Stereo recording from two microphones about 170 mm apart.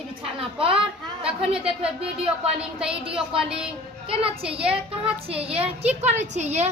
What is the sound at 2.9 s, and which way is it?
A woman's voice, 30° right (ahead or behind).